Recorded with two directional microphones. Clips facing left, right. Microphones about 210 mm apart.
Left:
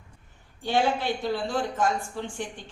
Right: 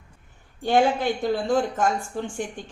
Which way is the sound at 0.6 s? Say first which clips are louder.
Right 5 dB; 50° right (ahead or behind).